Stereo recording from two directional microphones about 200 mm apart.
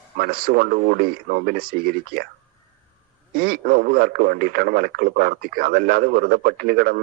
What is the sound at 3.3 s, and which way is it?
Speech, 50° right (ahead or behind).